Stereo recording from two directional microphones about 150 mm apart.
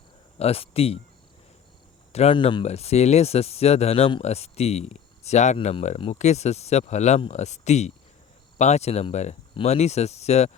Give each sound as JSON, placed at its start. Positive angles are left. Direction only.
{"t": 0.3, "sound": "speech", "side_deg": 40}
{"t": 2.1, "sound": "speech", "side_deg": 40}
{"t": 2.6, "sound": "speech", "side_deg": 45}
{"t": 5.5, "sound": "speech", "side_deg": 35}